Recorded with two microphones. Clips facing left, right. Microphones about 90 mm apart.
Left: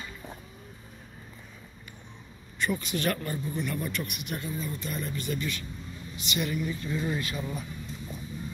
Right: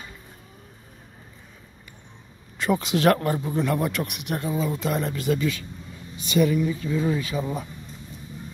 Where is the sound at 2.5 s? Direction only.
90° right.